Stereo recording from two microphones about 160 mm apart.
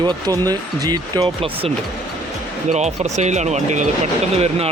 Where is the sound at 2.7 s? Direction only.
45° right (ahead or behind).